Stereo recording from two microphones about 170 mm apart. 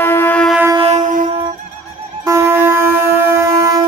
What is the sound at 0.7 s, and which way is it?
Train, 40° right (ahead or behind).